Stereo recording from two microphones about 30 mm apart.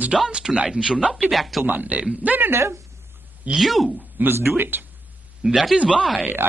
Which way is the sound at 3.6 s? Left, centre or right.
Centre.